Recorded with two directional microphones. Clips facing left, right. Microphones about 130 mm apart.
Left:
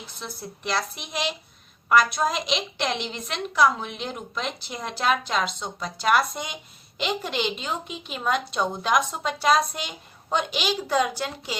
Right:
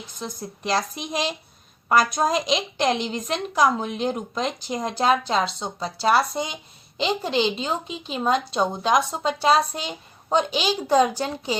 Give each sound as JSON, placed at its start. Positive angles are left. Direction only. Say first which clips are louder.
{"t": 0.6, "sound": "a woman's voice", "louder": "right 4 dB", "side_deg": -35}